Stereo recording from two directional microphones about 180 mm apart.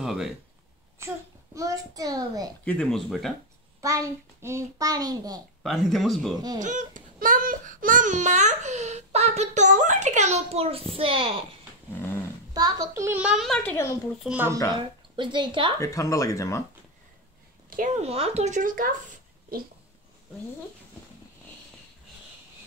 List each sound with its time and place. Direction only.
0.0 s speech: centre (ahead or behind)
0.9 s a child's voice: 15° right (ahead or behind)
2.6 s speech: 5° left (ahead or behind)
3.8 s a child's voice: 15° right (ahead or behind)
5.6 s speech: centre (ahead or behind)
6.6 s speech: 45° right (ahead or behind)
12.5 s a child's voice: 20° right (ahead or behind)
14.7 s a child's voice: 25° right (ahead or behind)
15.8 s speech: 15° left (ahead or behind)
17.6 s a sound: 50° right (ahead or behind)
18.0 s speech: 35° right (ahead or behind)